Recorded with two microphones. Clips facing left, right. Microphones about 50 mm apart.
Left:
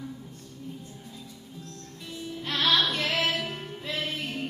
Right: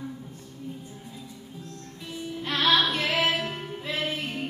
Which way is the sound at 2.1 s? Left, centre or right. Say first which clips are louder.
Right 2 dB; centre.